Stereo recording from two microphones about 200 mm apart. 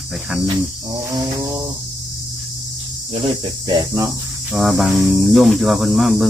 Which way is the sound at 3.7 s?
20° right (ahead or behind).